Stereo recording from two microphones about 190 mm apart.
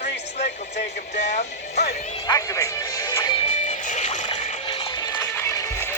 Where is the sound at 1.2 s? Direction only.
40° left (ahead or behind).